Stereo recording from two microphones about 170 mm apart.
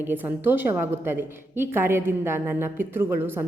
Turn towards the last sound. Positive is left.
turn(degrees=-15)  # may be behind; listen again after turning